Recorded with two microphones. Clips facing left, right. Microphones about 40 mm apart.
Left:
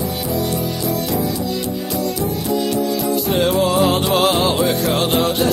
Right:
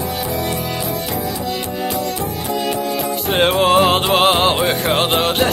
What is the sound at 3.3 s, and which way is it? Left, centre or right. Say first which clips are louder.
Music: right 4 dB; right.